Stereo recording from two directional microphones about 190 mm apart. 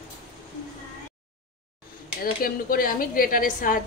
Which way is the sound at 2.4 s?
50° left (ahead or behind).